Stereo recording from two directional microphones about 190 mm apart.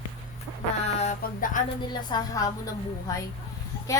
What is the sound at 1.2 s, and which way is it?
Speech, 45° left (ahead or behind).